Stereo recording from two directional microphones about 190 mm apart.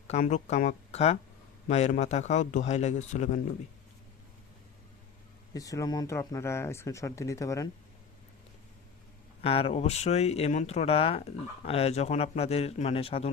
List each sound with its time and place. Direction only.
0.1 s speech: 35° left (ahead or behind)
5.5 s speech: 20° left (ahead or behind)
9.4 s speech: 30° left (ahead or behind)